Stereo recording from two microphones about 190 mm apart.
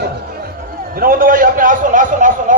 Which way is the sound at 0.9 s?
50° right (ahead or behind).